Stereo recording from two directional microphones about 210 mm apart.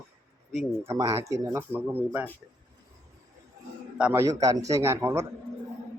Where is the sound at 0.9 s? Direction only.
15° right (ahead or behind).